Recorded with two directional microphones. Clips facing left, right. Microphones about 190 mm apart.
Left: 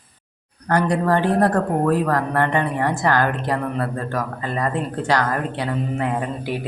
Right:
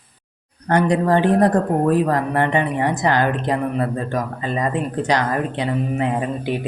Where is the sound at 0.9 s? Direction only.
20° right (ahead or behind).